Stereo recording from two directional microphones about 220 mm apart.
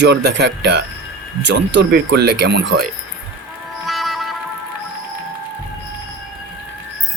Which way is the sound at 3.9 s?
Centre (ahead or behind).